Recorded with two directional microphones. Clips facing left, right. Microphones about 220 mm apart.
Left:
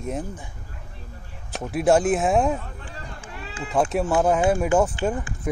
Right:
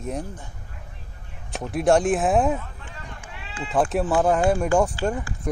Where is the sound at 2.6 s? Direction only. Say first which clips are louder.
Left 3 dB; 35° left (ahead or behind).